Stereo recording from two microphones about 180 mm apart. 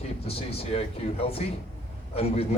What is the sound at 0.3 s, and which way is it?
Speech, 30° left (ahead or behind).